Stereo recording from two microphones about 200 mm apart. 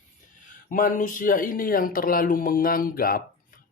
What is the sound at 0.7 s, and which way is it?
Speech, 40° left (ahead or behind).